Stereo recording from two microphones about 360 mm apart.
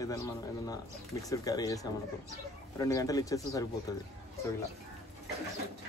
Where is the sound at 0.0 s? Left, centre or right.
Centre.